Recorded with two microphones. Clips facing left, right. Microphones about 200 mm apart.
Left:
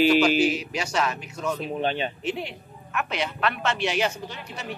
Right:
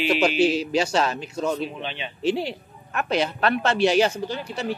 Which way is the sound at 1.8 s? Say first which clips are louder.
Left 7 dB; 40° left (ahead or behind).